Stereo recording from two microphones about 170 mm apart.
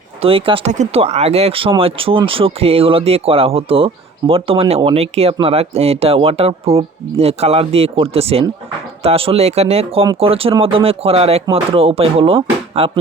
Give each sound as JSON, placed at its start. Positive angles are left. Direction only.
{"t": 0.2, "sound": "speech", "side_deg": -35}